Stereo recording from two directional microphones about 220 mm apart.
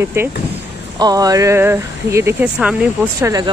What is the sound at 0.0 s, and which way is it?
Speech, 10° right (ahead or behind).